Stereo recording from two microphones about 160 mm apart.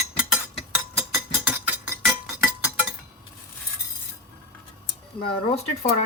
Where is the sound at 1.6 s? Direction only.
5° right (ahead or behind).